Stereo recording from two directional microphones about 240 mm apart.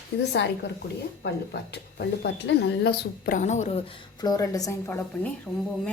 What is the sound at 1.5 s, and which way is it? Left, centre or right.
A woman's voice, left.